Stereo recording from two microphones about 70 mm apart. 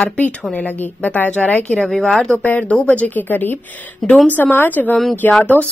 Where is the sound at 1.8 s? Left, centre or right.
Centre.